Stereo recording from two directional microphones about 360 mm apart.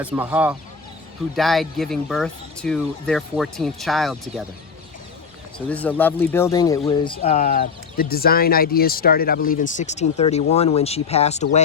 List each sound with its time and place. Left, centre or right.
0.0 s speech: centre
5.6 s speech: centre